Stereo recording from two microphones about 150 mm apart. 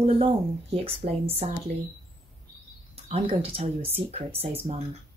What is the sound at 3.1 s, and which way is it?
Speech, 40° right (ahead or behind).